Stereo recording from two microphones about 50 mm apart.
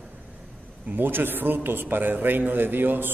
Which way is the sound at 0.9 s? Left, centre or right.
Right.